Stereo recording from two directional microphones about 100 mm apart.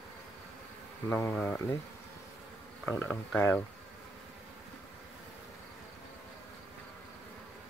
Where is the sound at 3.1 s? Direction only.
5° left (ahead or behind).